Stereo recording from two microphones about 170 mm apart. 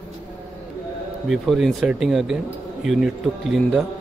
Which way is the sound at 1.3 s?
Centre (ahead or behind).